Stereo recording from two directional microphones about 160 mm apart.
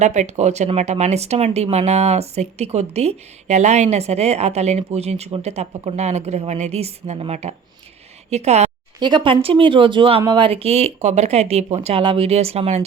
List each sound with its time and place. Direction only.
0.0 s speech: 45° right (ahead or behind)
9.0 s speech: 30° right (ahead or behind)